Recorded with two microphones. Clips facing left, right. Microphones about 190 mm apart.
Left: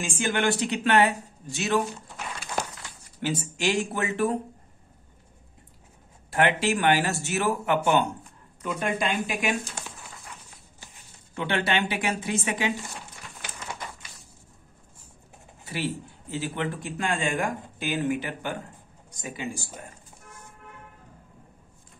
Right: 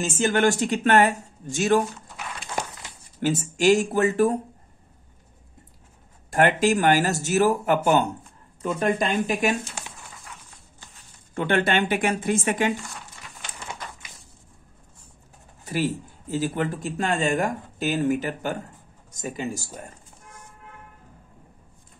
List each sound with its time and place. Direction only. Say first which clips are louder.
0.1 s speech: right 4 dB; 40° right (ahead or behind)
3.2 s speech: right 6 dB; 45° right (ahead or behind)
6.3 s speech: right 4 dB; 45° right (ahead or behind)
11.3 s speech: right 4 dB; 50° right (ahead or behind)
15.6 s speech: right 5 dB; 45° right (ahead or behind)